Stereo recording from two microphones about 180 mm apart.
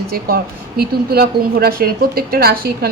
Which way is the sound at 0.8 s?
55° right (ahead or behind).